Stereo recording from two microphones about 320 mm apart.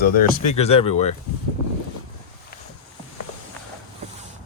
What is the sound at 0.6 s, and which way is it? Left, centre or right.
Speech, centre.